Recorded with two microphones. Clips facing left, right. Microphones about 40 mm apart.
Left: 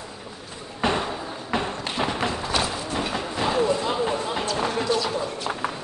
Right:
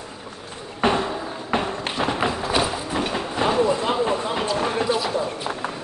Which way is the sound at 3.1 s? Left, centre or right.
Centre.